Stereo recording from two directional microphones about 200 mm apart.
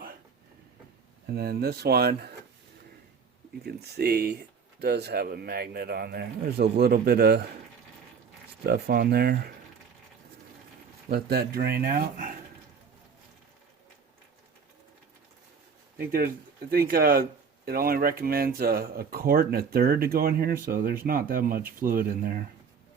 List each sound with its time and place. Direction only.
1.3 s speech: 50° right (ahead or behind)
3.6 s speech: 55° right (ahead or behind)
8.6 s speech: 55° right (ahead or behind)
11.1 s speech: 50° right (ahead or behind)
16.0 s speech: 50° right (ahead or behind)